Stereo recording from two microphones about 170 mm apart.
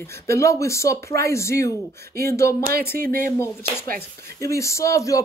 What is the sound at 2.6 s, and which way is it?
Speech, 65° right (ahead or behind).